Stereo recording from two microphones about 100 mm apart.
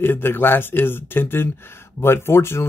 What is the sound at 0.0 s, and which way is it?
Speech, 20° left (ahead or behind).